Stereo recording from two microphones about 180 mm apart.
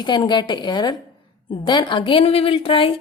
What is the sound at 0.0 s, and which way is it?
A woman's voice, 25° left (ahead or behind).